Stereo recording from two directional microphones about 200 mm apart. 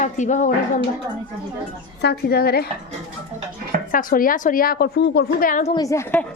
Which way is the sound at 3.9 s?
45° left (ahead or behind).